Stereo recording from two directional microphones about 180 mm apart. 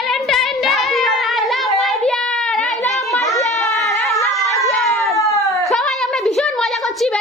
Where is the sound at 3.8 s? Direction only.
Centre (ahead or behind).